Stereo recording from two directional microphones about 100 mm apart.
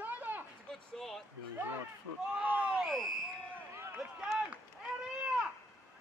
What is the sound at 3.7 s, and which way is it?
Run, 25° right (ahead or behind).